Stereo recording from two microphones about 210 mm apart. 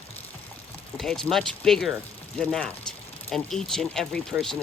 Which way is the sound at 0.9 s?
Centre (ahead or behind).